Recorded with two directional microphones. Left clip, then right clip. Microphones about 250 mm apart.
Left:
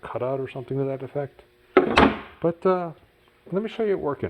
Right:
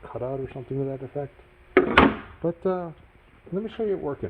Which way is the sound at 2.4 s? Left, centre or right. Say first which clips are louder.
Left 7 dB; left.